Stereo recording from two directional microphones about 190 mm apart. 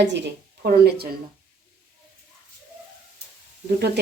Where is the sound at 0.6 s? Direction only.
55° right (ahead or behind).